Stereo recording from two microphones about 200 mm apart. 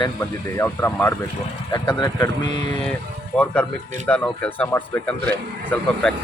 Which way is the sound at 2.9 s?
5° left (ahead or behind).